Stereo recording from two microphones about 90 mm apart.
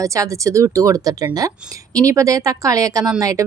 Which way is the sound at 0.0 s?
35° right (ahead or behind).